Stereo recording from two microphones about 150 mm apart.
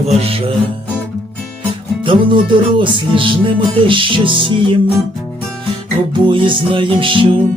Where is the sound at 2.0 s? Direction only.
35° right (ahead or behind).